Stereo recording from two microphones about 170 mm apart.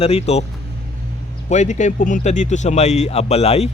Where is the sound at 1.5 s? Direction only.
45° left (ahead or behind).